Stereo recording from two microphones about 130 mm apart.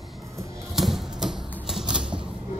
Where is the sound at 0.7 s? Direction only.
Centre (ahead or behind).